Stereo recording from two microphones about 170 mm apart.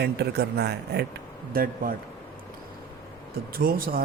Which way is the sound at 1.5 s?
60° right (ahead or behind).